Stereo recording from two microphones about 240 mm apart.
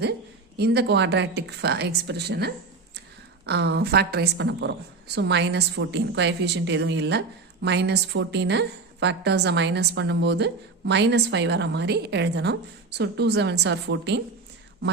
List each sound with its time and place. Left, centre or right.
0.5 s a woman's voice: right